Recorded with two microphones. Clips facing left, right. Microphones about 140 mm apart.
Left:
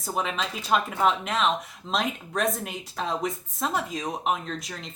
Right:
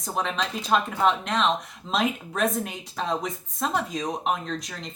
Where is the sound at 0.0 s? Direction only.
5° left (ahead or behind).